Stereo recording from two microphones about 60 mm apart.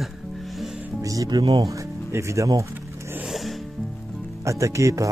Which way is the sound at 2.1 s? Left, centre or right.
Right.